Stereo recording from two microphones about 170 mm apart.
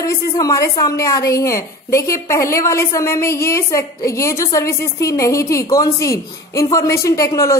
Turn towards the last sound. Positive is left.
turn(degrees=20)  # may be behind; listen again after turning